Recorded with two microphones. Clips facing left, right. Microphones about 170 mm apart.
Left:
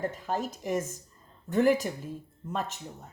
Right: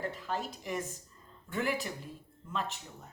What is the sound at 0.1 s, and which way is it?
Speech, 45° left (ahead or behind).